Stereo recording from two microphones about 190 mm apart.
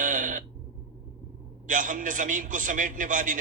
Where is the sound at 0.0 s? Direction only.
45° right (ahead or behind).